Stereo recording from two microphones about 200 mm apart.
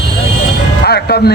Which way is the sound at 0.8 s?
55° left (ahead or behind).